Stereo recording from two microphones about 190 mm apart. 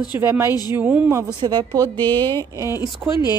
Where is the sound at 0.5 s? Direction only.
20° left (ahead or behind).